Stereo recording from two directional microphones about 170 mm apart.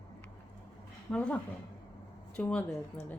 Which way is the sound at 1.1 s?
5° left (ahead or behind).